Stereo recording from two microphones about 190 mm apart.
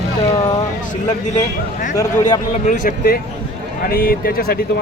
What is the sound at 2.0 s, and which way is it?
Speech, 20° left (ahead or behind).